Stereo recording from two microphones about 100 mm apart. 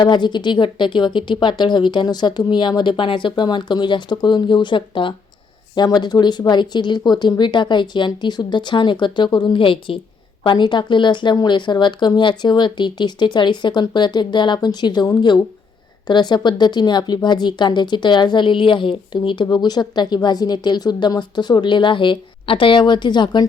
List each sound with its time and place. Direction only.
0.0 s a woman's voice: 50° left (ahead or behind)